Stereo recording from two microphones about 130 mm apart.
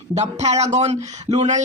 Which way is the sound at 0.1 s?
60° right (ahead or behind).